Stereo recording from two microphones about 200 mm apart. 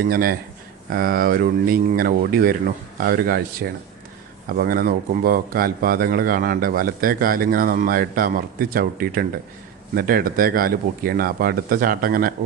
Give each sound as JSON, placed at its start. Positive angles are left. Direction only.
{"t": 0.0, "sound": "speech", "side_deg": -50}